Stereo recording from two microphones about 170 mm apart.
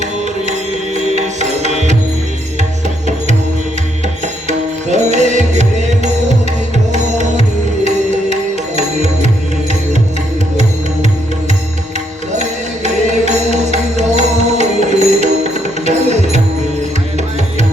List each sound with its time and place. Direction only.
1.1 s music: 45° right (ahead or behind)
4.4 s music: 45° right (ahead or behind)
12.3 s music: 40° right (ahead or behind)